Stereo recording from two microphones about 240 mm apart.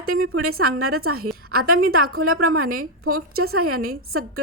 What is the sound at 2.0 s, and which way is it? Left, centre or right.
Speech, right.